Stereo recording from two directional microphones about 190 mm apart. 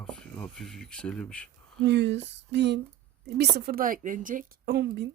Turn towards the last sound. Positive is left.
turn(degrees=-60)  # may be behind; listen again after turning